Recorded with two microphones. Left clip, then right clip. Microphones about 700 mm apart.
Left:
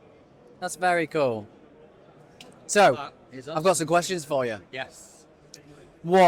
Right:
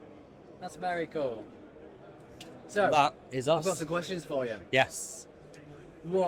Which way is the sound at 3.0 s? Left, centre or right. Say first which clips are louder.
Right 11 dB; right.